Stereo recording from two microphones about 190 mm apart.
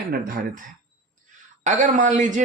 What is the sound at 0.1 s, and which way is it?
Speech, 50° right (ahead or behind).